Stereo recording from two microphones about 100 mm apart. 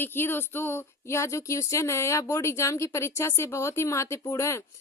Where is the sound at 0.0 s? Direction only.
20° left (ahead or behind).